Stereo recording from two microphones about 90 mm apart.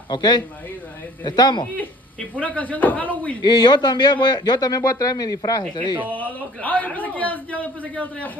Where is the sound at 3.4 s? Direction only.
55° left (ahead or behind).